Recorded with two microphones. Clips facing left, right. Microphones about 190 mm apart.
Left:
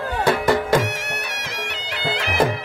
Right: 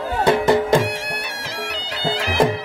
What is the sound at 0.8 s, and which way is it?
Music, 30° right (ahead or behind).